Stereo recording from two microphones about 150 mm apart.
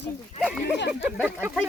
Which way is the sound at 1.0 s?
10° right (ahead or behind).